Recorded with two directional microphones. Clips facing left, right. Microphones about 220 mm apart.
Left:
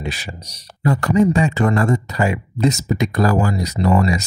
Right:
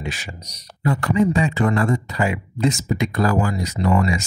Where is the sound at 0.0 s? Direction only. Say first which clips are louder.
Left 3 dB; 35° left (ahead or behind).